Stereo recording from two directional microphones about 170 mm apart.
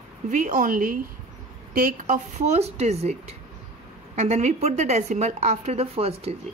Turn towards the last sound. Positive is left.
turn(degrees=-35)  # may be behind; listen again after turning